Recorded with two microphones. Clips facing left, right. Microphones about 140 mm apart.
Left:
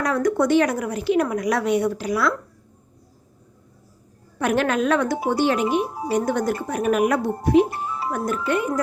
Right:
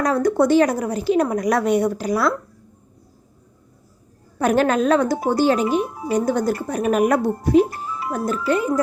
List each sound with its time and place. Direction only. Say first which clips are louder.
0.0 s a woman's voice: right 3 dB; 30° right (ahead or behind)
4.4 s a woman's voice: right 3 dB; 35° right (ahead or behind)
5.8 s speech: right 1 dB; 35° left (ahead or behind)
6.1 s a woman's voice: right 2 dB; 35° right (ahead or behind)
7.7 s music: left 1 dB; 30° left (ahead or behind)
8.1 s a woman's voice: right 3 dB; 30° right (ahead or behind)